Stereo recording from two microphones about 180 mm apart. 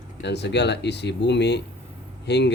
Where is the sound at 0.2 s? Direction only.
70° left (ahead or behind).